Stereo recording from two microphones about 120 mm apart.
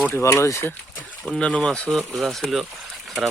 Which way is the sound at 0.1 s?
25° left (ahead or behind).